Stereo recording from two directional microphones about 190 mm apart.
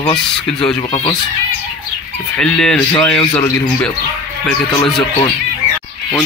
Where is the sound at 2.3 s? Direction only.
5° left (ahead or behind).